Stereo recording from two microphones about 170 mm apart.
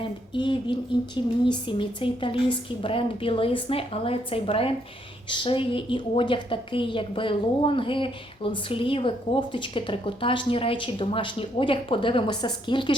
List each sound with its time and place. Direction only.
0.0 s speech: 30° left (ahead or behind)